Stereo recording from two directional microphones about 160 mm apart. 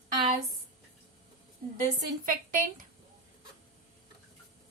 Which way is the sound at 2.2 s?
60° right (ahead or behind).